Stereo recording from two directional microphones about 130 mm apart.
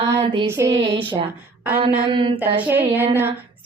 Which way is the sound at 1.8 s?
40° right (ahead or behind).